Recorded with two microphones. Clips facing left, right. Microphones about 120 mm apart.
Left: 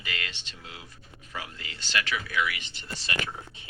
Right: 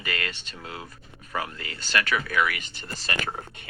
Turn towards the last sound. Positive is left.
turn(degrees=-55)  # may be behind; listen again after turning